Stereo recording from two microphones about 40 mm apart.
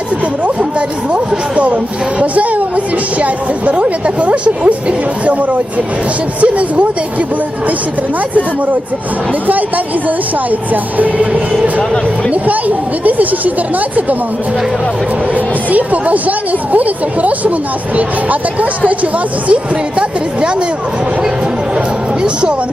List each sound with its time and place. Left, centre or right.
0.8 s speech: right
9.5 s speech: right
12.3 s speech: right
15.4 s speech: right
22.2 s speech: right